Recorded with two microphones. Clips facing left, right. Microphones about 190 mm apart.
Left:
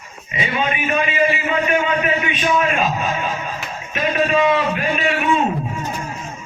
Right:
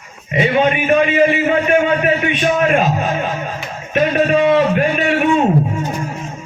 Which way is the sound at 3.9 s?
50° right (ahead or behind).